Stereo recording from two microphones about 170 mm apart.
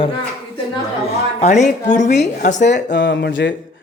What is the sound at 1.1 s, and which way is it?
A woman's voice, 40° left (ahead or behind).